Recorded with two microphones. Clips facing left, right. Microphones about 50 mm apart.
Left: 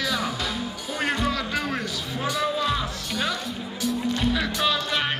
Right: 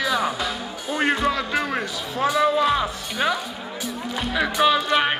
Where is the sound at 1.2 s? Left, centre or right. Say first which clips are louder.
Right 4 dB; centre.